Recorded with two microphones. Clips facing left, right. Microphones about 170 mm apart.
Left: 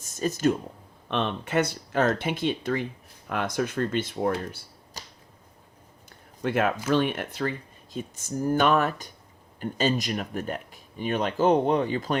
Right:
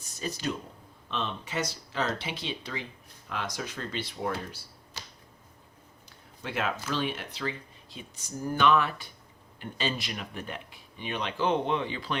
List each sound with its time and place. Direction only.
0.0 s speech: 45° left (ahead or behind)
1.0 s speech: 60° left (ahead or behind)
4.9 s finger snapping: 40° left (ahead or behind)
6.4 s speech: 50° left (ahead or behind)